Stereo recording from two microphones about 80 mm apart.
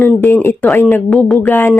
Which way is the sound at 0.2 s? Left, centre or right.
Left.